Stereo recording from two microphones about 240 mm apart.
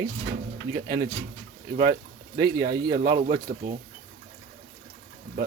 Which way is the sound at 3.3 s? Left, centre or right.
Right.